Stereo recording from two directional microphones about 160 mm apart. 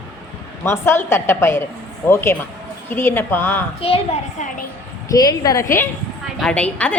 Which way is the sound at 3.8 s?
35° left (ahead or behind).